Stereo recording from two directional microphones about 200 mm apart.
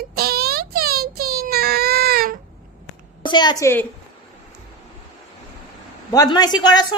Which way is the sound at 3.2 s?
20° left (ahead or behind).